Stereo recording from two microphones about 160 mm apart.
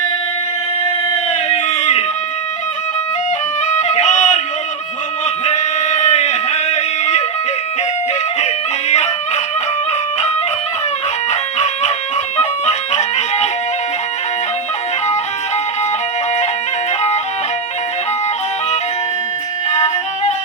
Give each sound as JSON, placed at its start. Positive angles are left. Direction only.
{"t": 0.9, "sound": "a sound", "side_deg": 40}
{"t": 3.8, "sound": "music", "side_deg": 45}
{"t": 5.5, "sound": "a sound", "side_deg": 45}
{"t": 8.9, "sound": "chicken", "side_deg": 45}
{"t": 11.3, "sound": "music", "side_deg": 45}
{"t": 19.7, "sound": "music", "side_deg": 45}